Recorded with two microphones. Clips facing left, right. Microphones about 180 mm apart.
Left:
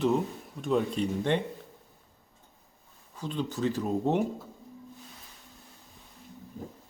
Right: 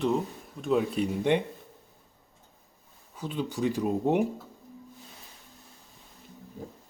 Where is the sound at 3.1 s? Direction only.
10° right (ahead or behind).